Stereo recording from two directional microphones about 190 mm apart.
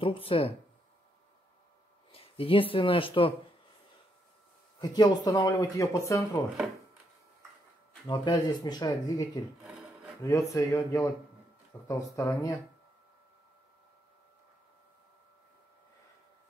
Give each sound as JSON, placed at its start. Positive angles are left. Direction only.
{"t": 0.0, "sound": "speech", "side_deg": 30}
{"t": 2.1, "sound": "speech", "side_deg": 30}
{"t": 4.7, "sound": "speech", "side_deg": 20}
{"t": 8.1, "sound": "speech", "side_deg": 20}